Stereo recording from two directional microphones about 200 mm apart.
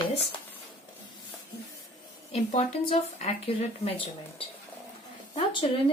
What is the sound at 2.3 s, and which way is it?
A woman's voice, 30° left (ahead or behind).